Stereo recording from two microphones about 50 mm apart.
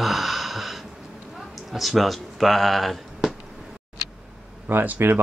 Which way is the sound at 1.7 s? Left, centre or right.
Centre.